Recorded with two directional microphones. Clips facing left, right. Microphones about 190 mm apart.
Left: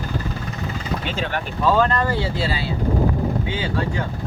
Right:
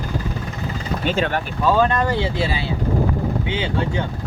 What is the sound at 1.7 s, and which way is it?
Speech, 20° right (ahead or behind).